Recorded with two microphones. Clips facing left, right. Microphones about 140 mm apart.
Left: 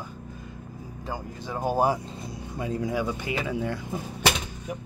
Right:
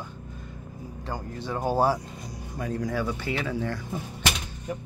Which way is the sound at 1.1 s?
10° left (ahead or behind).